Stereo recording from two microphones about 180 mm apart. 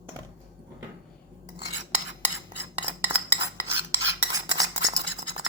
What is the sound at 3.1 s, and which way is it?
Cutlery, 10° right (ahead or behind).